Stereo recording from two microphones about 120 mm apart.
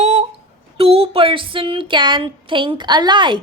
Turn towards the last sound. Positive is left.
turn(degrees=-40)  # may be behind; listen again after turning